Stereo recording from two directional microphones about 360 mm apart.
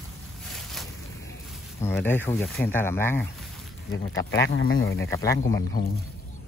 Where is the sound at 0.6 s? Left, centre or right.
Centre.